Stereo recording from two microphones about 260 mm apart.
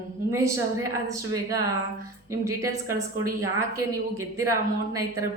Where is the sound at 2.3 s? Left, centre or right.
Centre.